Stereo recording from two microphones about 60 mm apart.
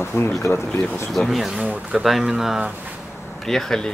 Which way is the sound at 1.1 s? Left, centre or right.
Centre.